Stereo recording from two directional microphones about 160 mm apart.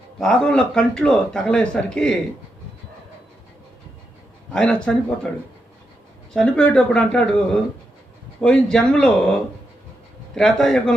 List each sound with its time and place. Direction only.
0.2 s speech: 5° left (ahead or behind)
4.5 s speech: 5° left (ahead or behind)
6.3 s speech: 5° left (ahead or behind)
10.3 s speech: 5° left (ahead or behind)